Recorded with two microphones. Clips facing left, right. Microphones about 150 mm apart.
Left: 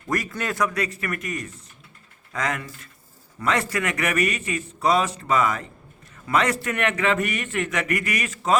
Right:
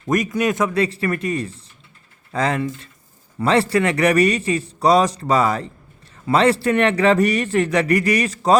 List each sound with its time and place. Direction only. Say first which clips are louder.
0.1 s a man's voice: right 8 dB; 20° right (ahead or behind); by 8.5 s 35° right (ahead or behind)